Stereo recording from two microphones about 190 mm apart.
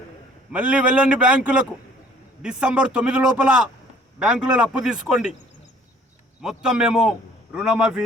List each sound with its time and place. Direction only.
0.5 s a man's voice: 5° right (ahead or behind)
6.4 s a man's voice: 5° right (ahead or behind)